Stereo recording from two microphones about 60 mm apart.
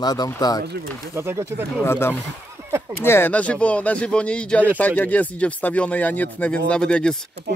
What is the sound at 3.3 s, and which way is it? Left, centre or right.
Speech, left.